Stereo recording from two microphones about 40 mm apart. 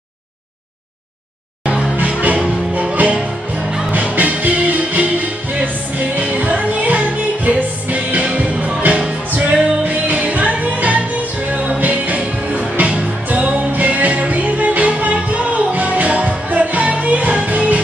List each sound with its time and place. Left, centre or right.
2.0 s music: right